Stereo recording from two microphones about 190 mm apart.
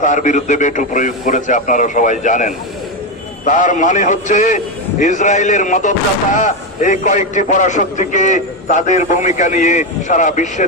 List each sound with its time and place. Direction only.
0.0 s a man's voice: 40° left (ahead or behind)